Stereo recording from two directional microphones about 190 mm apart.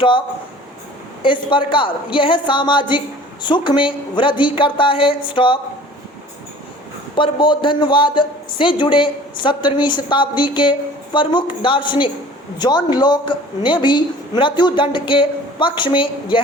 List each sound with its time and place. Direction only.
1.2 s a woman's voice: 25° left (ahead or behind)
7.2 s a woman's voice: 25° left (ahead or behind)